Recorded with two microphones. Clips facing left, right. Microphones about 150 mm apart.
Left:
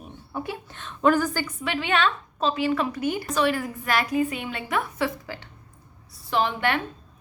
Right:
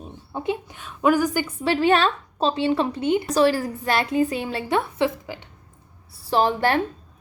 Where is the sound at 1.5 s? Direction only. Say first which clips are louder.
Right 8 dB; 35° right (ahead or behind); by 5.5 s 20° right (ahead or behind).